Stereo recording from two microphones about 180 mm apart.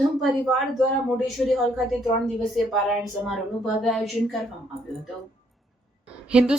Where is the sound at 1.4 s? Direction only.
Centre (ahead or behind).